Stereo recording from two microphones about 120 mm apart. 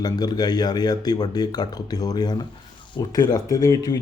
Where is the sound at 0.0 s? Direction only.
35° left (ahead or behind).